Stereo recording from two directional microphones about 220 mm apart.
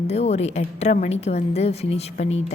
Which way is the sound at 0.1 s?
30° left (ahead or behind).